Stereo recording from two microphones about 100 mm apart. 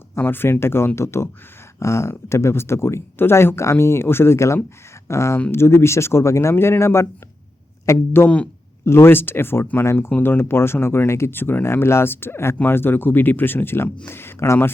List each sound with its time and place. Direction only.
0.2 s speech: 20° left (ahead or behind)